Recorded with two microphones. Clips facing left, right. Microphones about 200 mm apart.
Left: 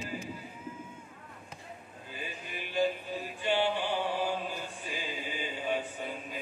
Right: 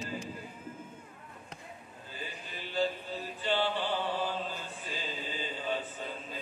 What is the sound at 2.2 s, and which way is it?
Music, 15° left (ahead or behind).